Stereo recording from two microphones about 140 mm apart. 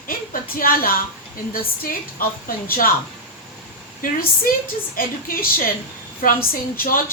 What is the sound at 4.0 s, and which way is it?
A woman's voice, 90° left.